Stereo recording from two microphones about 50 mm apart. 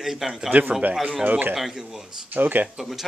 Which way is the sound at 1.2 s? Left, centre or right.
Right.